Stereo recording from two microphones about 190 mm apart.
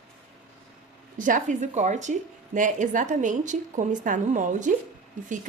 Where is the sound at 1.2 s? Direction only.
40° right (ahead or behind).